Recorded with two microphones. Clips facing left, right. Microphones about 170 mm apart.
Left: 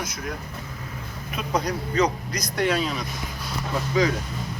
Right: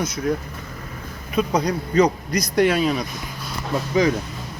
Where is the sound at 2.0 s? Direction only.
10° right (ahead or behind).